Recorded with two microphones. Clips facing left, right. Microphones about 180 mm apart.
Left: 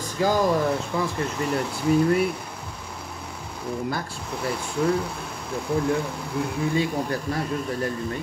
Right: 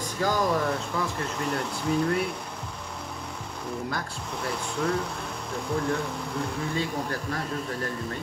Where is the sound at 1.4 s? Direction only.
5° left (ahead or behind).